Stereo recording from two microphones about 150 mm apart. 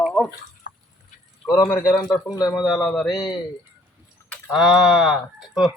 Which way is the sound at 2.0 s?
20° left (ahead or behind).